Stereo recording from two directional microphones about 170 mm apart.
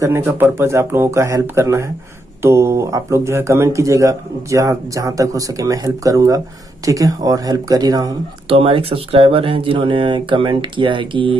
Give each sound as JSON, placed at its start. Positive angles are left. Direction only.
{"t": 0.0, "sound": "speech", "side_deg": -15}
{"t": 8.5, "sound": "speech", "side_deg": -35}